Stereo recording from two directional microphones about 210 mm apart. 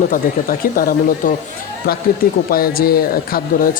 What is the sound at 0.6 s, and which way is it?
Speech, 45° left (ahead or behind).